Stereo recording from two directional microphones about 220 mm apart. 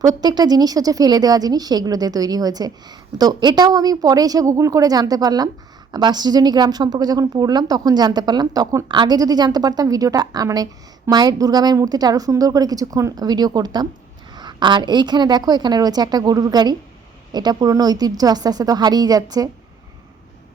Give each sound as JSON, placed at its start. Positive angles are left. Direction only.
{"t": 0.0, "sound": "a woman's voice", "side_deg": -20}